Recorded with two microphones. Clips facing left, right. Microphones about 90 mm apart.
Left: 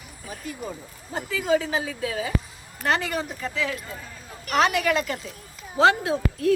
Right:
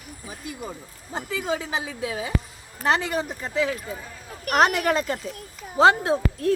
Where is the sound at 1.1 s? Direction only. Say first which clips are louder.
Left 4 dB; 25° right (ahead or behind).